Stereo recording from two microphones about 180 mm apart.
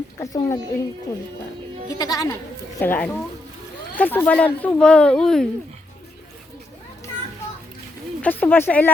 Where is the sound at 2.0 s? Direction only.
20° left (ahead or behind).